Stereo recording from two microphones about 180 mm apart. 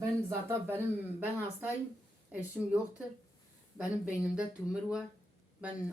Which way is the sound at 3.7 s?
5° right (ahead or behind).